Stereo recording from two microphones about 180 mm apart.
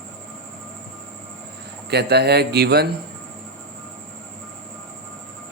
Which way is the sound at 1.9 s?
65° right (ahead or behind).